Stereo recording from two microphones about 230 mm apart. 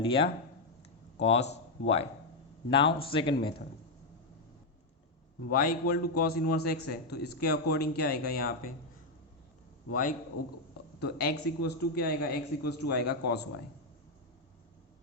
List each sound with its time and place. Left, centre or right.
0.0 s a man's voice: left
5.5 s a man's voice: left
9.9 s a man's voice: left